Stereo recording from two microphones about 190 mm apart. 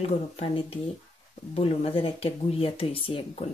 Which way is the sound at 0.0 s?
30° left (ahead or behind).